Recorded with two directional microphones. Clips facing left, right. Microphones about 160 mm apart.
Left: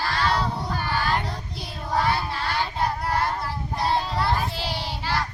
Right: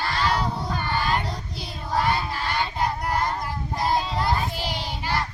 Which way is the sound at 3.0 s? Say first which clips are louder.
Even; 15° right (ahead or behind).